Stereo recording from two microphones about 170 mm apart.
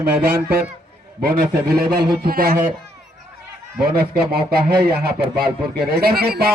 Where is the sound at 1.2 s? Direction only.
60° right (ahead or behind).